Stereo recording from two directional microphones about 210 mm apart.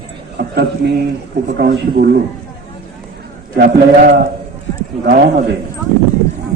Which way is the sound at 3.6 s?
35° right (ahead or behind).